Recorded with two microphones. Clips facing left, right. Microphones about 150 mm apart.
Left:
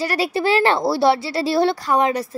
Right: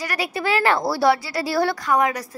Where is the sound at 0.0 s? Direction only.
30° left (ahead or behind).